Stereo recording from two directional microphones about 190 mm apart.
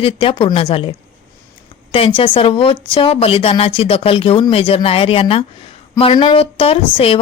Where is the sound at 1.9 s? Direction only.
30° left (ahead or behind).